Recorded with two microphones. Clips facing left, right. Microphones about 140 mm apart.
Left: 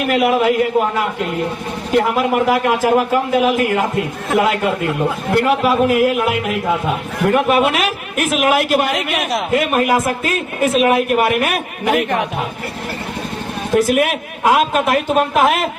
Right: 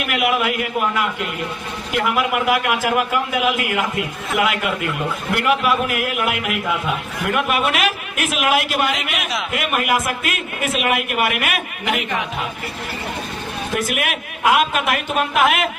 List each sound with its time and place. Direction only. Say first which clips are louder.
0.0 s a man's voice: left 6 dB; 35° left (ahead or behind); by 9.4 s 50° left (ahead or behind)
9.5 s a man's voice: left 5 dB; 35° left (ahead or behind)
13.7 s a man's voice: left 10 dB; 35° left (ahead or behind)